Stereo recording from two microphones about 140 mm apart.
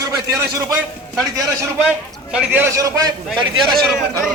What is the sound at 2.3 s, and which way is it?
Speech, 15° right (ahead or behind).